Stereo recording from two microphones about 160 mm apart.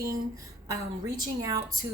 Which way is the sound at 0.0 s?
20° right (ahead or behind).